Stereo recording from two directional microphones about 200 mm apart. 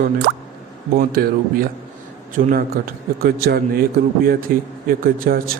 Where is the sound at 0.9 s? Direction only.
45° right (ahead or behind).